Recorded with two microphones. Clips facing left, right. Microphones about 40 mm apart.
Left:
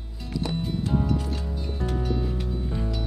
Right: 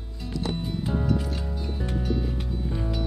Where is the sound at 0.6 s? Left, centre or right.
Centre.